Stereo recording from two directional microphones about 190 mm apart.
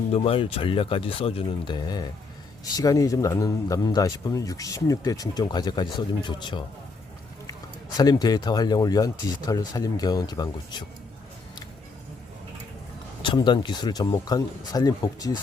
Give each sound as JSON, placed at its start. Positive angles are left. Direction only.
{"t": 0.1, "sound": "a man's voice", "side_deg": 30}
{"t": 7.9, "sound": "a man's voice", "side_deg": 20}
{"t": 13.2, "sound": "a man's voice", "side_deg": 25}